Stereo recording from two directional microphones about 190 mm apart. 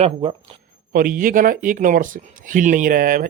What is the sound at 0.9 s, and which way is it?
Speech, 45° right (ahead or behind).